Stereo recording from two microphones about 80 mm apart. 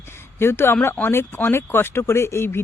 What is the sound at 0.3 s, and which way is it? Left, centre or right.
Speech, left.